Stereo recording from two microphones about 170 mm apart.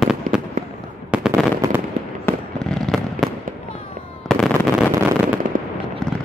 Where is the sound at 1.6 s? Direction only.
20° right (ahead or behind).